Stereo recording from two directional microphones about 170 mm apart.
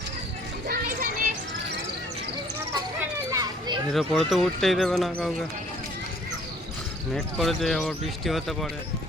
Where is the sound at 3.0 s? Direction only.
20° right (ahead or behind).